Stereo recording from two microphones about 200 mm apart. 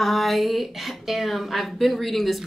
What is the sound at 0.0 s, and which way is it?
Speech, centre (ahead or behind).